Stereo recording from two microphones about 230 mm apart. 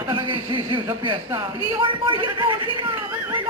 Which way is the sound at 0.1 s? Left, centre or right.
Right.